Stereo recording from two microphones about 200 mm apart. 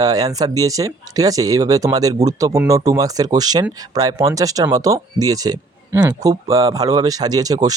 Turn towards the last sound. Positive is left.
turn(degrees=-20)  # may be behind; listen again after turning